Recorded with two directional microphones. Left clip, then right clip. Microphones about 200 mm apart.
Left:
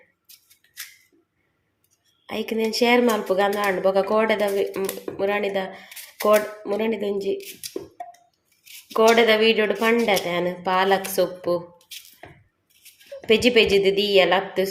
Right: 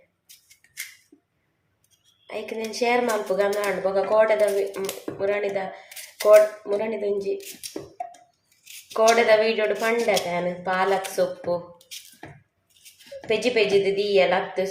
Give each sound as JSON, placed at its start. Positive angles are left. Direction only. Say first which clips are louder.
{"t": 2.6, "sound": "speech", "louder": "left 3 dB", "side_deg": 40}
{"t": 8.9, "sound": "speech", "louder": "left 1 dB", "side_deg": 40}
{"t": 13.2, "sound": "a woman's voice", "louder": "left 4 dB", "side_deg": 45}